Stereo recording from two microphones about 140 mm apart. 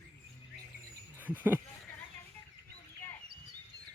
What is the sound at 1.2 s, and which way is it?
Speech, 10° right (ahead or behind).